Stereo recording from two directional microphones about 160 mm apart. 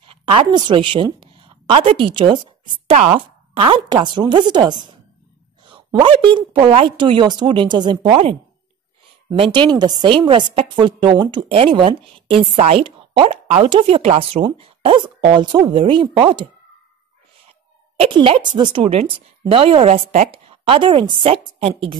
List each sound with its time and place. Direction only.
0.0 s a woman's voice: 35° right (ahead or behind)
5.9 s a woman's voice: 30° right (ahead or behind)
9.4 s a woman's voice: 30° right (ahead or behind)
17.9 s a woman's voice: 35° right (ahead or behind)